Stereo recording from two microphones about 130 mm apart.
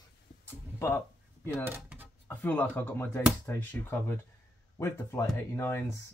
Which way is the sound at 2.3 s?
15° left (ahead or behind).